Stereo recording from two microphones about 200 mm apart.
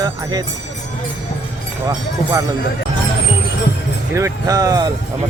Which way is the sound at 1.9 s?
15° right (ahead or behind).